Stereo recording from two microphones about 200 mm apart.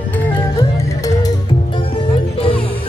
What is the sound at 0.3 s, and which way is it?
Music, 15° left (ahead or behind).